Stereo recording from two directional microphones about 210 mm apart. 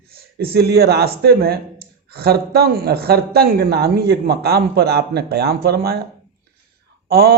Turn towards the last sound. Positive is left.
turn(degrees=-50)  # may be behind; listen again after turning